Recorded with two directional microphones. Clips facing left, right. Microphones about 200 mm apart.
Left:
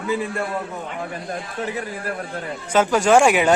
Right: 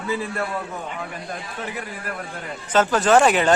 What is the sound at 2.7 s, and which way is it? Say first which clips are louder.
Speech: left 1 dB; 10° left (ahead or behind).